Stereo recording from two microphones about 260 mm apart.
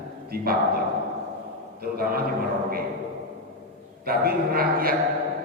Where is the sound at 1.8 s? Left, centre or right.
Right.